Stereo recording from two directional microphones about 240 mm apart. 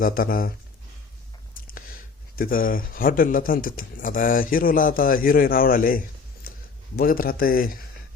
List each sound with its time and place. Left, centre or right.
0.0 s speech: left
2.3 s speech: left